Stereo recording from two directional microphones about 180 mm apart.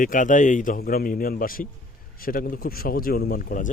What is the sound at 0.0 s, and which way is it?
Speech, 45° left (ahead or behind).